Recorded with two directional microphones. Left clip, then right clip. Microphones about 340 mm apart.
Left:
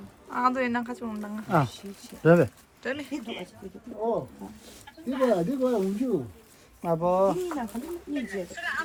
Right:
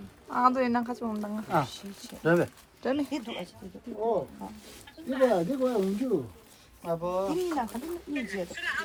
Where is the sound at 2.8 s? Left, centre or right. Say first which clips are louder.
Right 3 dB; centre.